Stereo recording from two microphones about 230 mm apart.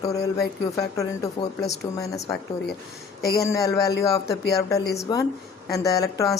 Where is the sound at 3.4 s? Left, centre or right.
Centre.